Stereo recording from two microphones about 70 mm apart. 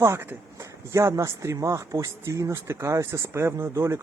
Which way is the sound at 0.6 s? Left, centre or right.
Right.